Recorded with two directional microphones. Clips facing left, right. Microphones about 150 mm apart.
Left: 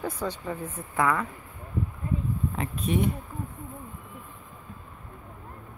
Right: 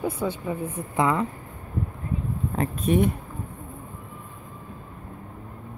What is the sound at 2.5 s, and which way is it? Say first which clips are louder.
Speech: right 8 dB; 45° right (ahead or behind).